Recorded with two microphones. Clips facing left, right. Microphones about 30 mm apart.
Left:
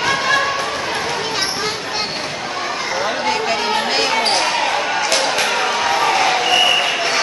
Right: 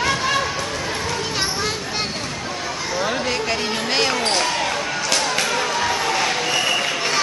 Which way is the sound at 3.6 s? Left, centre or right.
Left.